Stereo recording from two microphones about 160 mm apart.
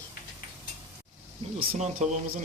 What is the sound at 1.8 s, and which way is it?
Speech, 50° right (ahead or behind).